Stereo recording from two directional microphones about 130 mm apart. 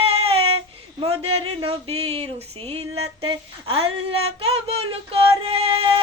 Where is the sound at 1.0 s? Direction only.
45° right (ahead or behind).